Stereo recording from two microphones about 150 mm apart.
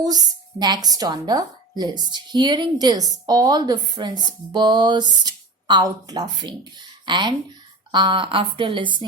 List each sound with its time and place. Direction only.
0.0 s speech: 25° right (ahead or behind)